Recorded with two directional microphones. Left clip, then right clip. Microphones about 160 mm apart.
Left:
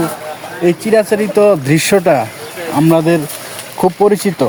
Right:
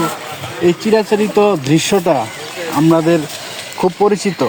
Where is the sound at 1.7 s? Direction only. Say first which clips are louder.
Left 3 dB; 40° left (ahead or behind).